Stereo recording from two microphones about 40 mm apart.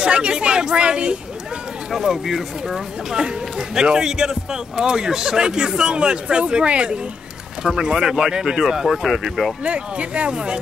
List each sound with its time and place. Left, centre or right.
0.0 s speech: right
1.9 s speech: centre
3.2 s speech: centre
7.6 s speech: centre
9.7 s speech: right